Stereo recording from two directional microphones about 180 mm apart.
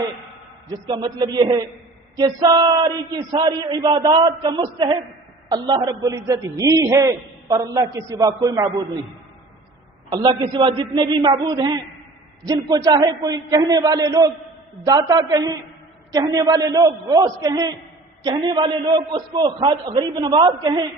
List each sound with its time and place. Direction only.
0.9 s a man's voice: 20° right (ahead or behind)
10.1 s a man's voice: 25° right (ahead or behind)